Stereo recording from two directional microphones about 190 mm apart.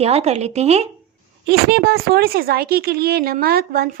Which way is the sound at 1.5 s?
55° right (ahead or behind).